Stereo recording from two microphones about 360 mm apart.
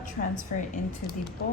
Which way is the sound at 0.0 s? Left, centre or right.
Left.